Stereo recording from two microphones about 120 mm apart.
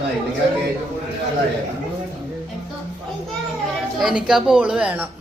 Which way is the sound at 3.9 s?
5° right (ahead or behind).